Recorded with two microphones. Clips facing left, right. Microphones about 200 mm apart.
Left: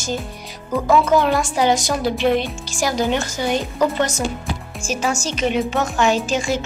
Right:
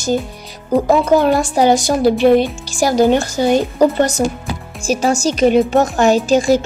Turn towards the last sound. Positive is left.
turn(degrees=-35)  # may be behind; listen again after turning